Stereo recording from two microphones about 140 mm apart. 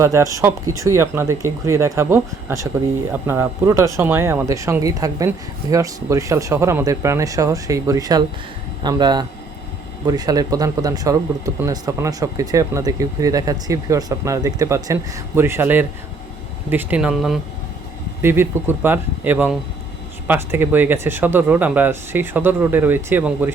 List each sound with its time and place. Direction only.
0.0 s speech: 20° right (ahead or behind); by 17.4 s 5° right (ahead or behind)
18.2 s speech: 15° right (ahead or behind)